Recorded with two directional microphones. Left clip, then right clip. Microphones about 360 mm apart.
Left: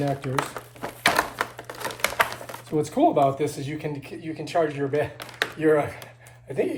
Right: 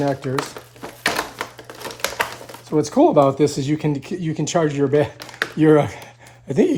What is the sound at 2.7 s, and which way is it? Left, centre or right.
Speech, centre.